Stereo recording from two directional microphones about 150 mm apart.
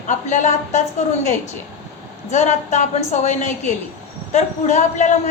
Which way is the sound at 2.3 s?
50° left (ahead or behind).